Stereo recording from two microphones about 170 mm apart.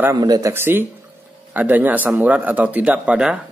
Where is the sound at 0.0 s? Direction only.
20° right (ahead or behind).